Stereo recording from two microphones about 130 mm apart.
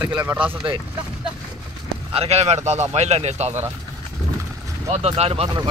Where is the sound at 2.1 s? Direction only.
55° right (ahead or behind).